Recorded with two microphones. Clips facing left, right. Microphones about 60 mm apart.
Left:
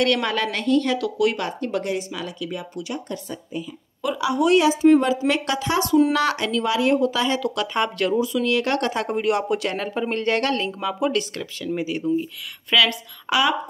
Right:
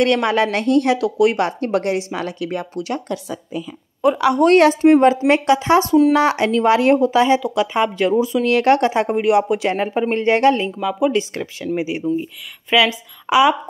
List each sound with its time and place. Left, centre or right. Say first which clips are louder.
0.1 s speech: right 6 dB; right
4.2 s speech: right 5 dB; right
4.9 s speech: right 6 dB; right
7.0 s speech: right 7 dB; right; by 8.1 s centre
8.1 s speech: right 5 dB; right
8.7 s speech: right 6 dB; right
10.7 s speech: right 5 dB; centre
11.1 s speech: right 4 dB; right